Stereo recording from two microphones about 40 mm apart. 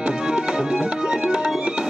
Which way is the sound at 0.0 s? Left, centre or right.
Right.